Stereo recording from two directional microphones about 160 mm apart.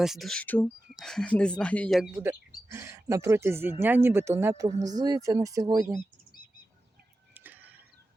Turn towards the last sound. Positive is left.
turn(degrees=-10)  # may be behind; listen again after turning